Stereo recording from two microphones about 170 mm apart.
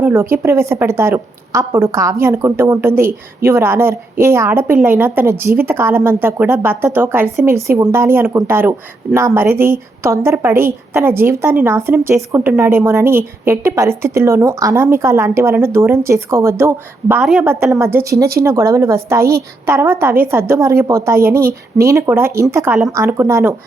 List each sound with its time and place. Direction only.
0.0 s a woman's voice: 15° right (ahead or behind)